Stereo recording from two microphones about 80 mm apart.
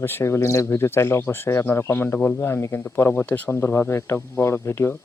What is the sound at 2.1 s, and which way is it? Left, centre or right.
Speech, centre.